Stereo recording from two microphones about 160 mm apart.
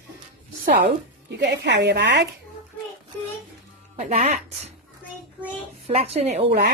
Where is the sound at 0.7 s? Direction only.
90° right.